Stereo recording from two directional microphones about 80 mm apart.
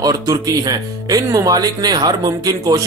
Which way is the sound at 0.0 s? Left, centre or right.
Right.